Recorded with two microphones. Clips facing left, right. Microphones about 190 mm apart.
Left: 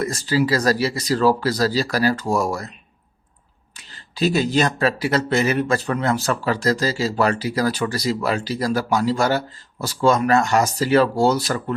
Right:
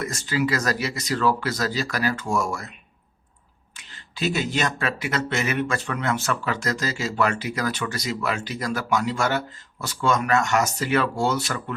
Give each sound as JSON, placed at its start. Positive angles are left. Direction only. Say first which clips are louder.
{"t": 0.0, "sound": "speech", "louder": "left 4 dB", "side_deg": 35}
{"t": 3.8, "sound": "speech", "louder": "left 7 dB", "side_deg": 35}